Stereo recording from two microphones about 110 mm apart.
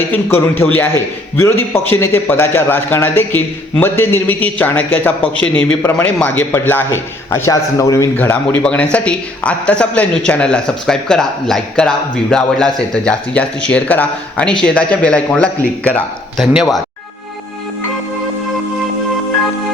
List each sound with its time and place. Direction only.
0.3 s a man's voice: 20° left (ahead or behind)
8.2 s speech: 15° left (ahead or behind)
16.4 s speech: 5° right (ahead or behind)